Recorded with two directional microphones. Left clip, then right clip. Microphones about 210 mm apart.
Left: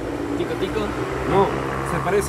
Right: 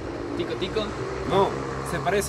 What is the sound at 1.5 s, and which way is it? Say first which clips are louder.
Vehicle: left 5 dB; 40° left (ahead or behind).